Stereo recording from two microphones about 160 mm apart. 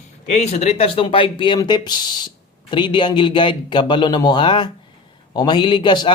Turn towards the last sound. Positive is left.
turn(degrees=30)  # may be behind; listen again after turning